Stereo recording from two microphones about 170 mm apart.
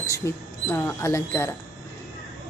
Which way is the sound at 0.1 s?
15° left (ahead or behind).